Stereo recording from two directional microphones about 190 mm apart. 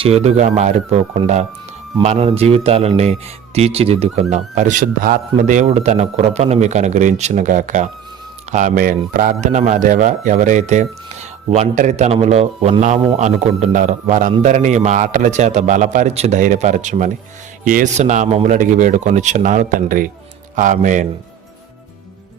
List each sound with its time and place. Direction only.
0.0 s speech: 35° right (ahead or behind)